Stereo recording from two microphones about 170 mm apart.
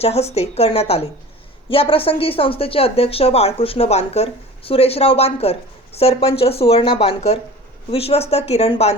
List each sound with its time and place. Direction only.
0.0 s speech: 40° left (ahead or behind)